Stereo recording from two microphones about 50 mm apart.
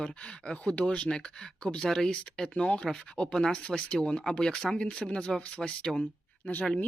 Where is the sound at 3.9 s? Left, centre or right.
Left.